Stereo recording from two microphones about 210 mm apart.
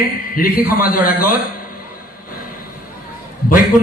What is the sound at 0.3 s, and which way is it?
Speech, 45° left (ahead or behind).